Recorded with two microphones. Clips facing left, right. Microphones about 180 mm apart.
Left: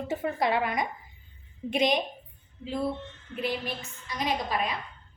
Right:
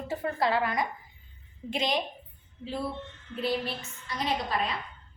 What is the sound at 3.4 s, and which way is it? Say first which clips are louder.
A woman's voice: right 1 dB; 15° left (ahead or behind).